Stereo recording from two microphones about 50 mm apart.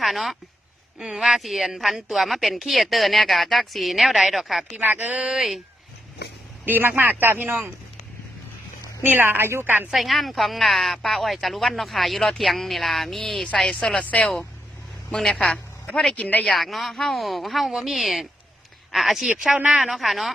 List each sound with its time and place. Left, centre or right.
0.0 s a woman's voice: centre
4.8 s a woman's voice: right
5.1 s speech: right
6.7 s speech: right
9.0 s speech: right
9.9 s a woman's voice: centre
14.0 s speech: left
15.1 s speech: centre
16.1 s speech: left
16.4 s a woman's voice: centre
19.9 s a woman's voice: centre